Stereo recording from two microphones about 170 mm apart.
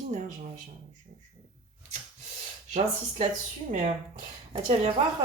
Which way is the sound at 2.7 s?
45° right (ahead or behind).